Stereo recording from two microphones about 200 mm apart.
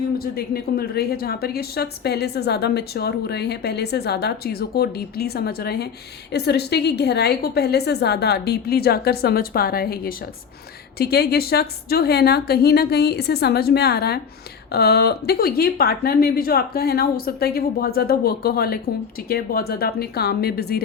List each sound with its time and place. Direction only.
0.2 s a woman's voice: 50° left (ahead or behind)